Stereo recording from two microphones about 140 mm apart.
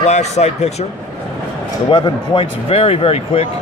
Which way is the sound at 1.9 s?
35° left (ahead or behind).